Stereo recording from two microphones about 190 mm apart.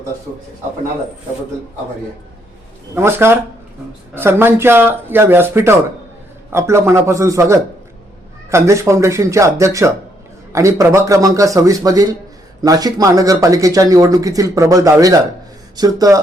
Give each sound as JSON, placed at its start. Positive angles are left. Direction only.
{"t": 2.9, "sound": "a man's voice", "side_deg": -15}